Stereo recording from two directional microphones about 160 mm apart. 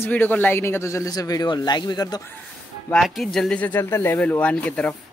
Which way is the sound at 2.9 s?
Centre (ahead or behind).